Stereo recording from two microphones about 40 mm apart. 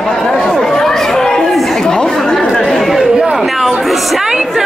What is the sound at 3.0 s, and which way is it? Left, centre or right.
Chatter, centre.